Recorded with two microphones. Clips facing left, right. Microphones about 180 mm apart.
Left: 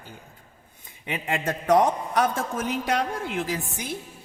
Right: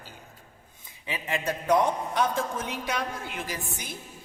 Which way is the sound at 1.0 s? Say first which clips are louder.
Left 3 dB; 60° left (ahead or behind).